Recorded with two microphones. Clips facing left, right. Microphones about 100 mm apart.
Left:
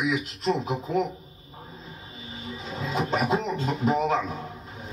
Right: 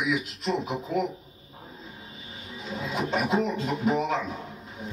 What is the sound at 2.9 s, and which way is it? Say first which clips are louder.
A man's voice: left 1 dB; 35° left (ahead or behind).